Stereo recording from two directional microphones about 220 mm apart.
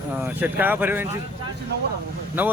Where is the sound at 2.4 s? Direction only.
10° right (ahead or behind).